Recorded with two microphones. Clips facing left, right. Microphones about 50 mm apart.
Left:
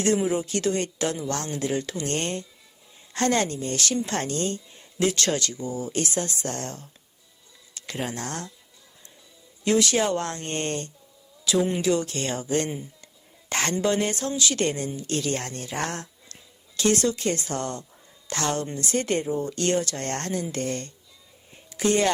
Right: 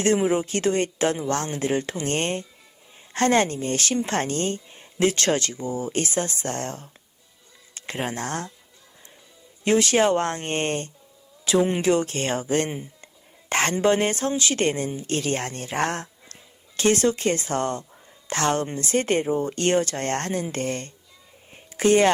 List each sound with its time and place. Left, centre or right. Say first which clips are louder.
0.0 s speech: right 2 dB; right
9.6 s speech: right 3 dB; right